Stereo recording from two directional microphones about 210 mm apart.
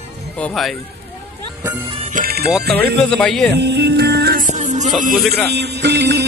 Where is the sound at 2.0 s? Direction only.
40° right (ahead or behind).